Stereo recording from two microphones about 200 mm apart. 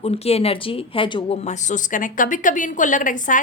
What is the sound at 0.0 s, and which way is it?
Speech, 30° left (ahead or behind).